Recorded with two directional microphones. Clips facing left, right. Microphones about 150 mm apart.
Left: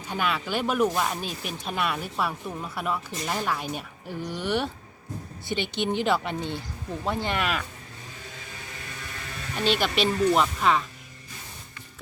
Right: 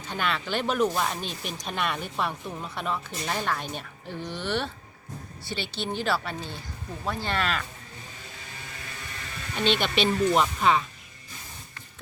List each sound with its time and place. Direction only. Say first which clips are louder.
0.1 s speech: left 1 dB; 10° left (ahead or behind)
9.6 s speech: even; 5° left (ahead or behind)